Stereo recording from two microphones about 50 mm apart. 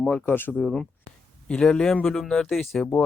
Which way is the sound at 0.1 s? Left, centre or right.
Left.